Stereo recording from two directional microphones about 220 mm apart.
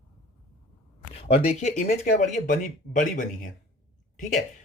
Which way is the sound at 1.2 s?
25° left (ahead or behind).